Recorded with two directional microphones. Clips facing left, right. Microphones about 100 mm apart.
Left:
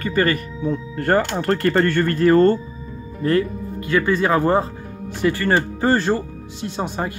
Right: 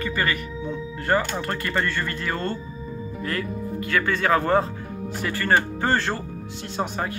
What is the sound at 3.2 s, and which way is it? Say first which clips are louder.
Speech: left 10 dB; 30° left (ahead or behind).